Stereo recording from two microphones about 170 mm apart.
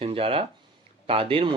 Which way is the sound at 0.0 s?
35° right (ahead or behind).